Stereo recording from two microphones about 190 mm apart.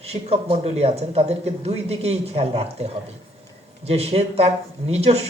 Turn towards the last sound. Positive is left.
turn(degrees=-35)  # may be behind; listen again after turning